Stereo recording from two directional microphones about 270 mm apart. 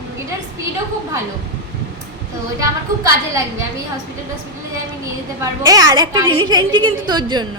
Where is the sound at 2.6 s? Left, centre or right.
Centre.